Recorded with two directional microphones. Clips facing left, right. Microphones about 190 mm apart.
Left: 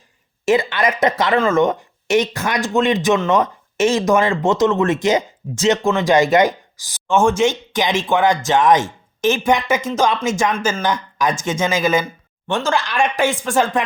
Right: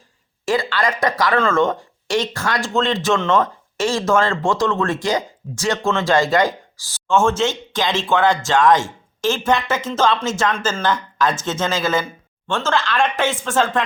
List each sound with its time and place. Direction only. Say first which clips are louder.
0.4 s speech: left 3 dB; 20° left (ahead or behind)